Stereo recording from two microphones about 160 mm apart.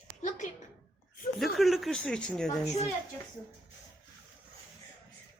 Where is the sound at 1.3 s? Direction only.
Centre (ahead or behind).